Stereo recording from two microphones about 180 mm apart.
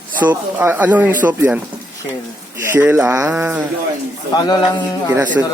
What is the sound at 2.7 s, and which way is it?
Speech, 10° right (ahead or behind).